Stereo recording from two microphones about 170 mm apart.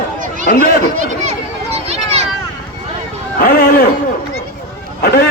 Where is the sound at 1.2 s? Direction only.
40° right (ahead or behind).